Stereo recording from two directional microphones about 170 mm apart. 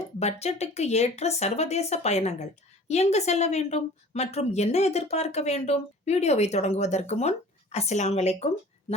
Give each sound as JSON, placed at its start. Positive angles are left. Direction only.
{"t": 0.2, "sound": "speech", "side_deg": 40}